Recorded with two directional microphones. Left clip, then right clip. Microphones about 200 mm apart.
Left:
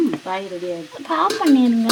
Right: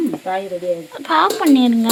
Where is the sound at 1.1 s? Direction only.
Centre (ahead or behind).